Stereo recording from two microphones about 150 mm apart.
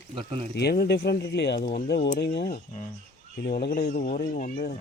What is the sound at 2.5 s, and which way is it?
Speech, 55° left (ahead or behind).